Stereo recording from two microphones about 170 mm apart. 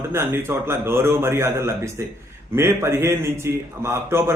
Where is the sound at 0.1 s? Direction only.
15° right (ahead or behind).